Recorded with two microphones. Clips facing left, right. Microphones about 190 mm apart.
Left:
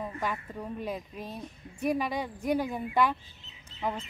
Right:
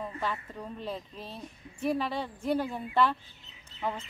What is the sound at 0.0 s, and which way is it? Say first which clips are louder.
A woman's voice: left 1 dB; 10° left (ahead or behind).